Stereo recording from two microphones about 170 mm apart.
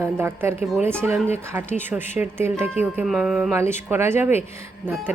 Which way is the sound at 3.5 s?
15° right (ahead or behind).